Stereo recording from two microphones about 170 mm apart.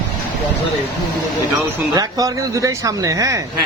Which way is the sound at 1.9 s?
20° right (ahead or behind).